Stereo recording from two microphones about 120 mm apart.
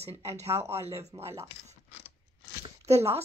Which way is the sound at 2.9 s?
60° right (ahead or behind).